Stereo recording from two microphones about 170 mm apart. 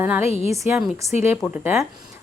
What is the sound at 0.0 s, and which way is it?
Speech, 15° right (ahead or behind).